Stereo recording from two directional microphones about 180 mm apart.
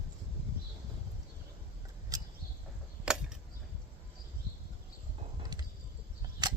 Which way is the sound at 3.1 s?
5° right (ahead or behind).